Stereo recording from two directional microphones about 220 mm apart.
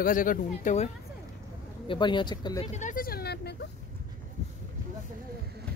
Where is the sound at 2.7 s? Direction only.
35° left (ahead or behind).